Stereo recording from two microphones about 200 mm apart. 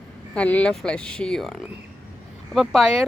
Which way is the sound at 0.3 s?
5° left (ahead or behind).